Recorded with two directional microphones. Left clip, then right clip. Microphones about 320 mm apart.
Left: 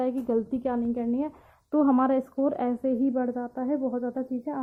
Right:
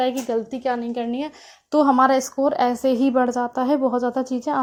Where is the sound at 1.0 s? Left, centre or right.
Centre.